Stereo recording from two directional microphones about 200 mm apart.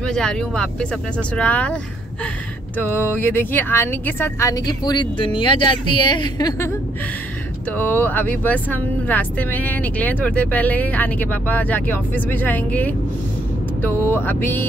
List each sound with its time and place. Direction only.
0.0 s speech: 5° left (ahead or behind)
2.8 s speech: 10° left (ahead or behind)
7.7 s speech: 10° left (ahead or behind)